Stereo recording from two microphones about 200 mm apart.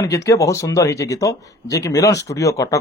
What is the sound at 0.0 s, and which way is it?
Speech, 15° left (ahead or behind).